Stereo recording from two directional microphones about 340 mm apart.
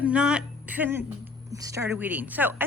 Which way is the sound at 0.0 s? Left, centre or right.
Centre.